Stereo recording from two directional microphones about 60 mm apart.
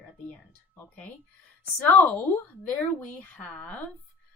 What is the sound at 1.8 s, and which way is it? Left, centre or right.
Speech, left.